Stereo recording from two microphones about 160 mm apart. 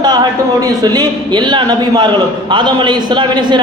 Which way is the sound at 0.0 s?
25° right (ahead or behind).